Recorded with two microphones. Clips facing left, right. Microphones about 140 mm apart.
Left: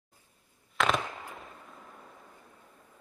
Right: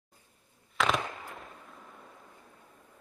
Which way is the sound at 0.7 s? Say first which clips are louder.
Left 1 dB; centre (ahead or behind).